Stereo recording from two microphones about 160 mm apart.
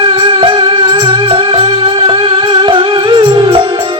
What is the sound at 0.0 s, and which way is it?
Music, 30° right (ahead or behind).